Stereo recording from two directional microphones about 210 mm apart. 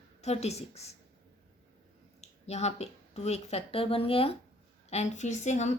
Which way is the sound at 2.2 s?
30° left (ahead or behind).